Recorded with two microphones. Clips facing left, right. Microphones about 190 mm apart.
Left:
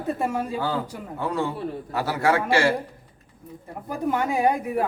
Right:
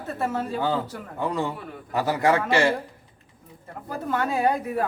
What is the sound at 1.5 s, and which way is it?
Speech, 30° left (ahead or behind).